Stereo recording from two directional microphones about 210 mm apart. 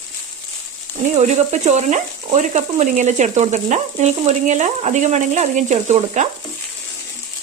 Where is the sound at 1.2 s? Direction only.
35° right (ahead or behind).